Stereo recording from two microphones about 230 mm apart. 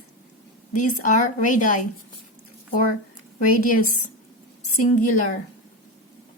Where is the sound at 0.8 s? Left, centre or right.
Left.